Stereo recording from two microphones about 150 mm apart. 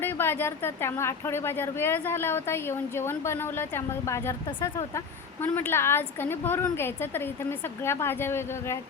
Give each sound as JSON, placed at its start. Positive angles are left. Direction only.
{"t": 0.0, "sound": "speech", "side_deg": 15}